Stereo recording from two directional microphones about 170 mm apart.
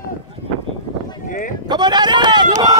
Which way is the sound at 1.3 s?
50° left (ahead or behind).